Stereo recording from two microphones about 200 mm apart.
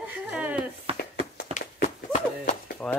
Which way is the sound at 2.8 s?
5° left (ahead or behind).